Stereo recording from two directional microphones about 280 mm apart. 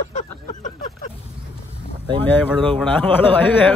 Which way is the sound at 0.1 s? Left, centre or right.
Left.